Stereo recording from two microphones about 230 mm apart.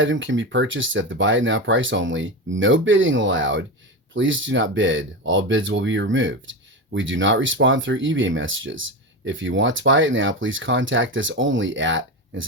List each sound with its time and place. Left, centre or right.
0.0 s speech: right